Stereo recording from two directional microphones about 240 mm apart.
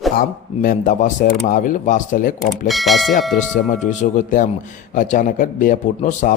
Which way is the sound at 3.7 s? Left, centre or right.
Left.